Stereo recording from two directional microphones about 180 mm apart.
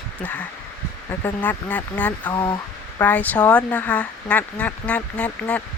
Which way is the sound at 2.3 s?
25° left (ahead or behind).